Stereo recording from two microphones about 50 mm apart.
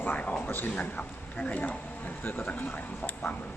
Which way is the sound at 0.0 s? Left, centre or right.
Left.